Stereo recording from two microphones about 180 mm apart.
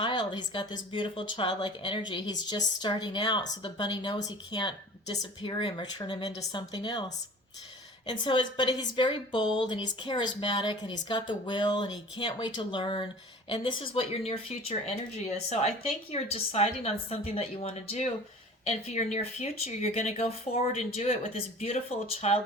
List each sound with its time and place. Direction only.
0.0 s a woman's voice: 25° left (ahead or behind)
8.2 s a woman's voice: 25° left (ahead or behind)